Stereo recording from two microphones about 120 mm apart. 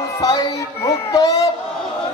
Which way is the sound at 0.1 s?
30° left (ahead or behind).